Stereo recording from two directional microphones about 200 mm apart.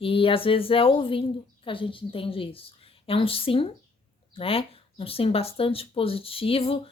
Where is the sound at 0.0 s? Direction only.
25° left (ahead or behind).